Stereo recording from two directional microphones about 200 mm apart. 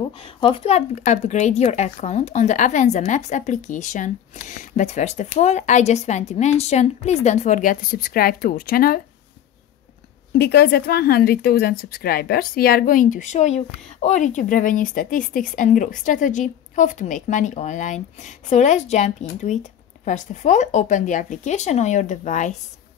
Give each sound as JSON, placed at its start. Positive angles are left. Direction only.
{"t": 0.2, "sound": "a woman's voice", "side_deg": 25}
{"t": 10.3, "sound": "a woman's voice", "side_deg": 50}